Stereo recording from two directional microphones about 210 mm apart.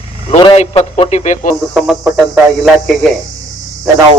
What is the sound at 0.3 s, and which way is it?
A man's voice, 25° left (ahead or behind).